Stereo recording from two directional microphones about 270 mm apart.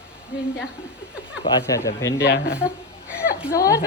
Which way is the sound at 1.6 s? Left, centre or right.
Centre.